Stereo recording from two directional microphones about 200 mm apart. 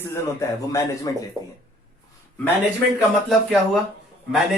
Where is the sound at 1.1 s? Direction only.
20° left (ahead or behind).